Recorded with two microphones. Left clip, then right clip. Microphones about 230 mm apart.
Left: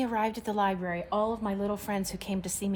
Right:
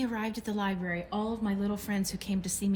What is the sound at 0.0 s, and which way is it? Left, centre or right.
A woman's voice, left.